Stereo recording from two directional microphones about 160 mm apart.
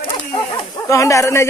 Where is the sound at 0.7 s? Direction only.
20° left (ahead or behind).